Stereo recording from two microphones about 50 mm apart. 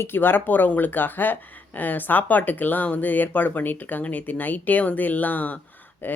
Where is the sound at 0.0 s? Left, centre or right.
Left.